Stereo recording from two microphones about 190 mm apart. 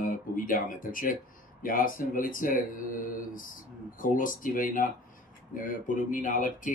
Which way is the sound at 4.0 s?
45° left (ahead or behind).